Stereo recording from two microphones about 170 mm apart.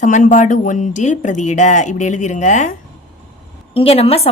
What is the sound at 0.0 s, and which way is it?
Speech, 50° left (ahead or behind).